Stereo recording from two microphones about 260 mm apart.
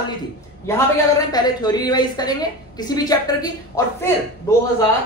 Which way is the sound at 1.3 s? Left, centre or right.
Centre.